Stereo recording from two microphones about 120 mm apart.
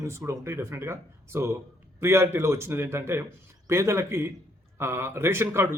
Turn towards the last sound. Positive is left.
turn(degrees=-20)  # may be behind; listen again after turning